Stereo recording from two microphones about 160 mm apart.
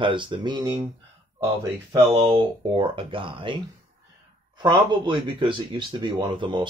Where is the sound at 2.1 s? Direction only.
35° right (ahead or behind).